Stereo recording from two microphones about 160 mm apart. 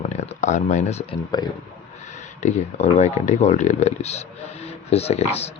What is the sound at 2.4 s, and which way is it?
Speech, 45° left (ahead or behind).